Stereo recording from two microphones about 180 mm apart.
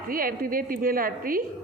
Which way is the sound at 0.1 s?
55° right (ahead or behind).